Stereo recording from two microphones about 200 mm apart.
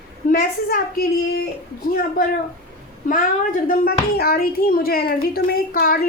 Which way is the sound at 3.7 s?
50° left (ahead or behind).